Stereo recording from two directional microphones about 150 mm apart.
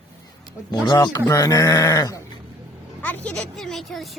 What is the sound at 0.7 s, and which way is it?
Speech, 30° left (ahead or behind).